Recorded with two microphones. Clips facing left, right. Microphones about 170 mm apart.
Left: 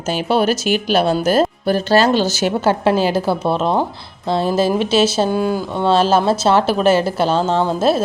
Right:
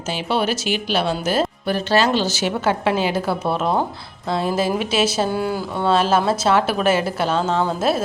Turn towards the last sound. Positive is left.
turn(degrees=30)  # may be behind; listen again after turning